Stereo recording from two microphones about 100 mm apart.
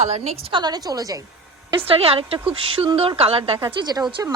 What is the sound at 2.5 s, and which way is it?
Speech, 60° right (ahead or behind).